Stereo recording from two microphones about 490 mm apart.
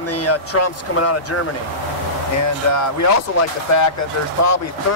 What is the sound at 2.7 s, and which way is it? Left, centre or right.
Speech, left.